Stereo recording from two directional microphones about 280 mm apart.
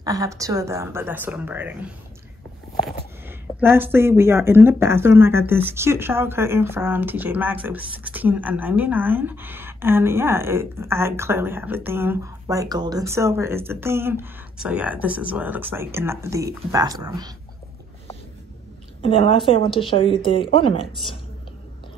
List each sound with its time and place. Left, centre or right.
0.0 s a woman's voice: centre
18.9 s speech: centre